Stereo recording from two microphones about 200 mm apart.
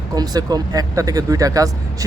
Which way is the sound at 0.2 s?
20° right (ahead or behind).